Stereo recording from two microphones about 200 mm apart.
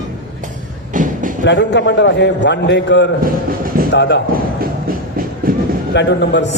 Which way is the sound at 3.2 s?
45° right (ahead or behind).